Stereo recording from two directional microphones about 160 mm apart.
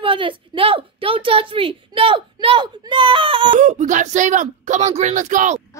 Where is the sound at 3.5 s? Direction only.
50° right (ahead or behind).